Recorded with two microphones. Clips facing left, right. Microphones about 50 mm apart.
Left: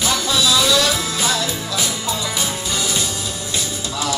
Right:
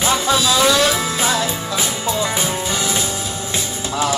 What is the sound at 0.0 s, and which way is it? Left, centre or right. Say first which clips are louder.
Music: right 2 dB; right.